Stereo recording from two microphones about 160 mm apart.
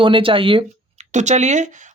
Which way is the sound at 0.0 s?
35° right (ahead or behind).